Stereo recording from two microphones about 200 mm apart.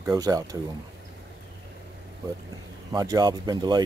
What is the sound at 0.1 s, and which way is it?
Speech, 20° right (ahead or behind).